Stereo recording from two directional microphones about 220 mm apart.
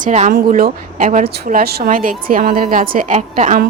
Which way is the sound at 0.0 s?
35° right (ahead or behind).